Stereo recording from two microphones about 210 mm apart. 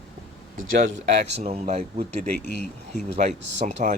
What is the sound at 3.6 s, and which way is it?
Speech, 35° right (ahead or behind).